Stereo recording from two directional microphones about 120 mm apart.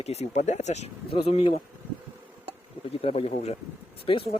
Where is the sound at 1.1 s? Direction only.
50° left (ahead or behind).